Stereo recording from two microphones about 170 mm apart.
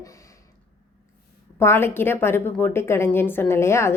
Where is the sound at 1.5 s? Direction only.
15° left (ahead or behind).